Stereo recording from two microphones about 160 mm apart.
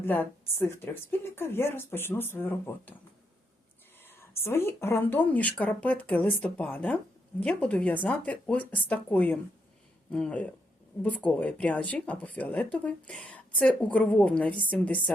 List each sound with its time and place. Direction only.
0.0 s speech: 10° left (ahead or behind)
4.2 s speech: 15° left (ahead or behind)